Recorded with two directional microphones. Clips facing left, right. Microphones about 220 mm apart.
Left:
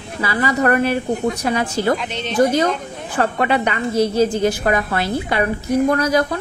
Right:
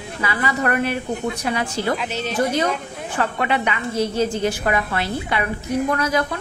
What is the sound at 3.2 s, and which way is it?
A woman's voice, 40° left (ahead or behind).